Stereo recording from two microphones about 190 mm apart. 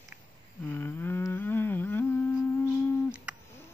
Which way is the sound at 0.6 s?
10° left (ahead or behind).